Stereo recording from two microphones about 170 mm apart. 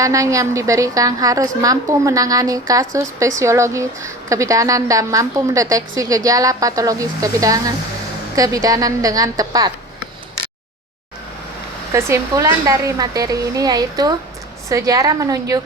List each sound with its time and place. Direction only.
0.0 s a woman's voice: 20° right (ahead or behind)
11.9 s a woman's voice: 15° right (ahead or behind)